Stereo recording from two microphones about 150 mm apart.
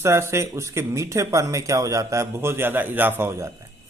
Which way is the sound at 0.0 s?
20° right (ahead or behind).